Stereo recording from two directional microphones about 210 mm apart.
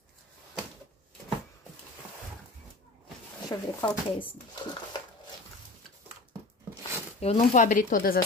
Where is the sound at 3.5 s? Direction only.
15° left (ahead or behind).